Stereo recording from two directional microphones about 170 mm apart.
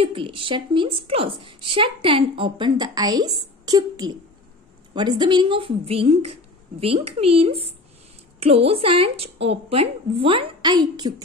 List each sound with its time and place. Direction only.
0.0 s a woman's voice: 30° right (ahead or behind)